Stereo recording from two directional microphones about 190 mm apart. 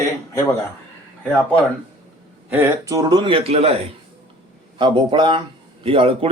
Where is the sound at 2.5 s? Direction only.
15° right (ahead or behind).